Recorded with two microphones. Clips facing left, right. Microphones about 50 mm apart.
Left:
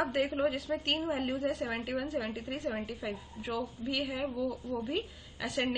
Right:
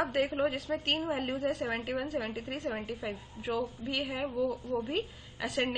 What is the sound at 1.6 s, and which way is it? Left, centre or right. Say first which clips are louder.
A woman's voice: right 1 dB; centre.